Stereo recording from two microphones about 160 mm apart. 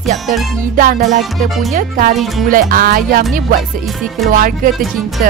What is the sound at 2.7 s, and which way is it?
Music, 60° right (ahead or behind).